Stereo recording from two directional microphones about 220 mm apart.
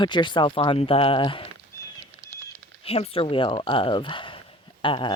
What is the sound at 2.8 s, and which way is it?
Speech, 25° left (ahead or behind).